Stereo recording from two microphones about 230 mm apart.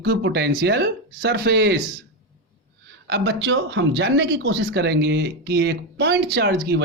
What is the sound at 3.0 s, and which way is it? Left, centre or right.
Speech, right.